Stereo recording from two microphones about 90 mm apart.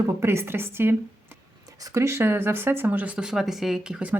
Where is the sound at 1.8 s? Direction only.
35° right (ahead or behind).